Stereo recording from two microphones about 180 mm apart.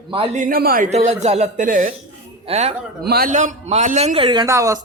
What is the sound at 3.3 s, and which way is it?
A man's voice, 40° right (ahead or behind).